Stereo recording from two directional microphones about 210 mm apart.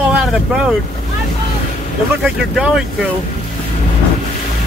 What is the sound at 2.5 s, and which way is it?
Speech, 5° right (ahead or behind).